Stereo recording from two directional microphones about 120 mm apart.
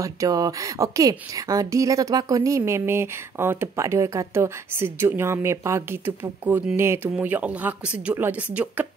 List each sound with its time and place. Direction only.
0.0 s a woman's voice: 30° right (ahead or behind); by 8.5 s 10° right (ahead or behind)